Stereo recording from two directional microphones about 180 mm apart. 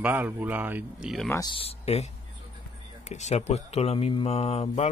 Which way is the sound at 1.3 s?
20° left (ahead or behind).